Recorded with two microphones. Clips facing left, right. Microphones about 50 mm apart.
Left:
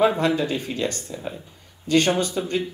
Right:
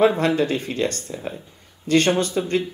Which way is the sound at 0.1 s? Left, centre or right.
Right.